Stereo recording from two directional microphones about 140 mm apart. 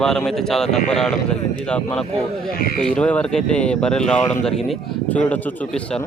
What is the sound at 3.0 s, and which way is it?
Speech, 10° left (ahead or behind).